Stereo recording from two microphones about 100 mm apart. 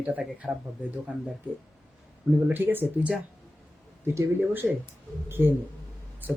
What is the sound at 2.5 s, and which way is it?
Speech, 20° right (ahead or behind).